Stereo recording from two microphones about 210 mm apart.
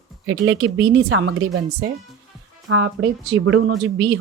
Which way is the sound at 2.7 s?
75° right (ahead or behind).